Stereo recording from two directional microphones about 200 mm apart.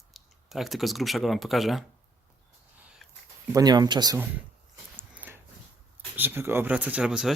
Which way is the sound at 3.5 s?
20° right (ahead or behind).